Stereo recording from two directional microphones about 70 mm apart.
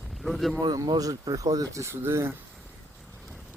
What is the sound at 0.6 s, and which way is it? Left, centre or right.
Speech, right.